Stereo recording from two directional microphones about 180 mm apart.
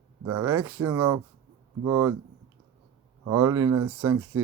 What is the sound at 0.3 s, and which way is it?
Speech, 15° right (ahead or behind).